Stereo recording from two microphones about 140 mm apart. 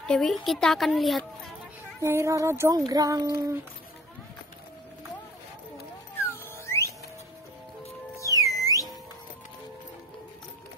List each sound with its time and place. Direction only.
0.0 s a woman's voice: 5° left (ahead or behind)
2.0 s speech: 20° right (ahead or behind)
6.3 s a sound: 20° left (ahead or behind)
8.2 s music: 25° left (ahead or behind)